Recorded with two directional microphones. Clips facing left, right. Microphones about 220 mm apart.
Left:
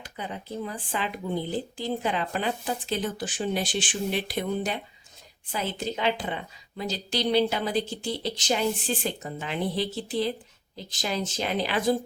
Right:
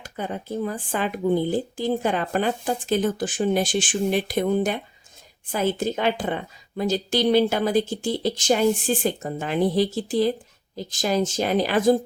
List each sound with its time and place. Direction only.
0.0 s a woman's voice: 50° right (ahead or behind)